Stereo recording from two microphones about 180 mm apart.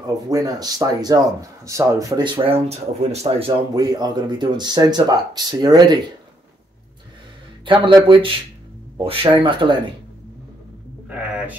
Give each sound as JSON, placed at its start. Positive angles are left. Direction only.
{"t": 0.3, "sound": "speech", "side_deg": -20}
{"t": 7.6, "sound": "speech", "side_deg": -25}
{"t": 11.1, "sound": "a sound", "side_deg": -5}